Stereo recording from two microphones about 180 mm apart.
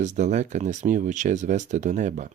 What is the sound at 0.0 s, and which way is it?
Speech, 40° right (ahead or behind).